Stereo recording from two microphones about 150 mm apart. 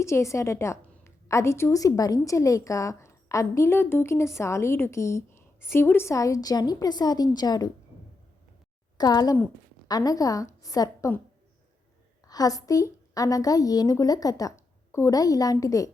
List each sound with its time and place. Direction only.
0.0 s a woman's voice: 20° left (ahead or behind)
9.0 s a woman's voice: 25° left (ahead or behind)
12.2 s a woman's voice: 25° left (ahead or behind)